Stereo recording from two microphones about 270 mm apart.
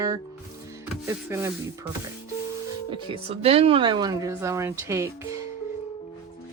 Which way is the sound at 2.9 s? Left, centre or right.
Centre.